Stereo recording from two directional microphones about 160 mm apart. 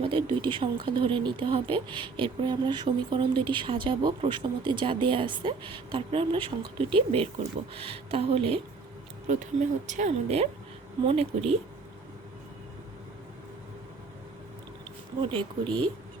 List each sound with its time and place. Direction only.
0.0 s speech: 30° right (ahead or behind)
9.2 s speech: 50° right (ahead or behind)
15.2 s speech: 30° right (ahead or behind)